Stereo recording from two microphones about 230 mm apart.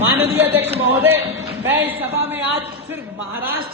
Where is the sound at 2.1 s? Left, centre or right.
Centre.